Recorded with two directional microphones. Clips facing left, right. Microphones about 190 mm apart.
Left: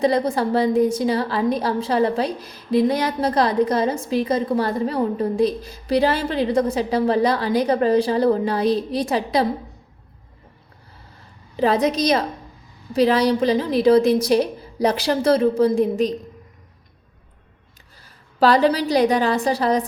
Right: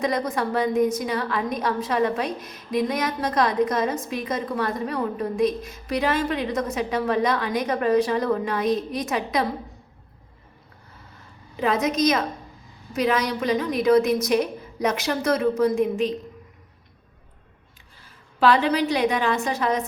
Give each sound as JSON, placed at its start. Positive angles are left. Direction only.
{"t": 0.0, "sound": "a woman's voice", "side_deg": 30}
{"t": 11.5, "sound": "a woman's voice", "side_deg": 35}
{"t": 18.0, "sound": "a woman's voice", "side_deg": 40}